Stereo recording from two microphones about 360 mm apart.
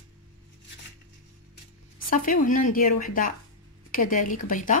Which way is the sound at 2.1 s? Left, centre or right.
Left.